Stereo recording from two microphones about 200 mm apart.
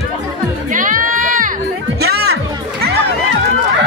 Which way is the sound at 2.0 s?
55° right (ahead or behind).